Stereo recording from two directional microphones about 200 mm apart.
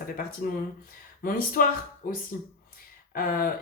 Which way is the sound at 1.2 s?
45° left (ahead or behind).